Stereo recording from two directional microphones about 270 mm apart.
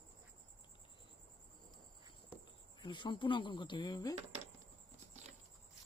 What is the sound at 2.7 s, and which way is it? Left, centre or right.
Speech, centre.